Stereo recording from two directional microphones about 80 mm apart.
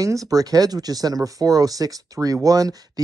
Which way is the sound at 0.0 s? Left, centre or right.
Right.